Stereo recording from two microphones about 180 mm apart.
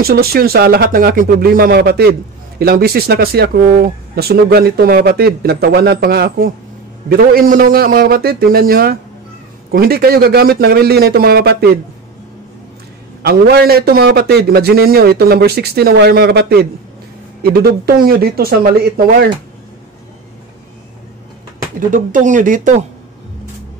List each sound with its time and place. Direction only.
0.0 s speech: 60° right (ahead or behind)
13.2 s speech: 60° right (ahead or behind)
21.7 s speech: 45° right (ahead or behind)